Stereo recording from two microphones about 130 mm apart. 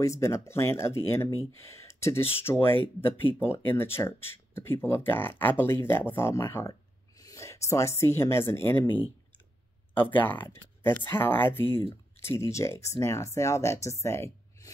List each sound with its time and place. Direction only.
0.0 s speech: 25° left (ahead or behind)
10.1 s speech: 15° left (ahead or behind)
14.0 s a sound: 20° left (ahead or behind)